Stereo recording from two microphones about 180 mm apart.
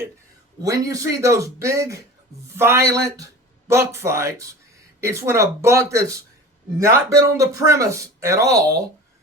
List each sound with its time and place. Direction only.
0.6 s speech: 20° right (ahead or behind)